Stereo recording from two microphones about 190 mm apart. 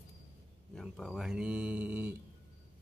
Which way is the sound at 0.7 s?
Centre (ahead or behind).